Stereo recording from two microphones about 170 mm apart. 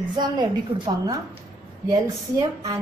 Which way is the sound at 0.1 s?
25° right (ahead or behind).